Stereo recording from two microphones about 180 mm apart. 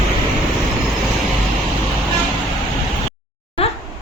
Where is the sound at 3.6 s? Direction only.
35° left (ahead or behind).